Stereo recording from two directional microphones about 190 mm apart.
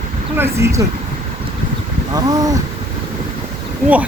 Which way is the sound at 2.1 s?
20° right (ahead or behind).